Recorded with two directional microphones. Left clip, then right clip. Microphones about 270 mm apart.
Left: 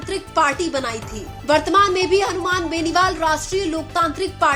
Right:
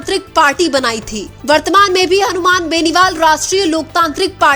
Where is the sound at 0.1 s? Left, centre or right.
Right.